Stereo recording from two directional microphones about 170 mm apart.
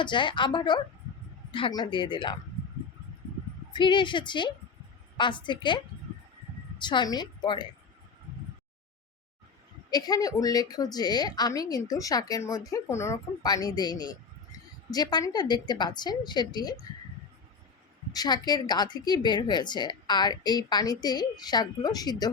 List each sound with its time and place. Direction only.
0.0 s a woman's voice: 30° left (ahead or behind)
3.7 s a woman's voice: 25° left (ahead or behind)
9.9 s a woman's voice: 20° left (ahead or behind)
18.1 s a woman's voice: 25° left (ahead or behind)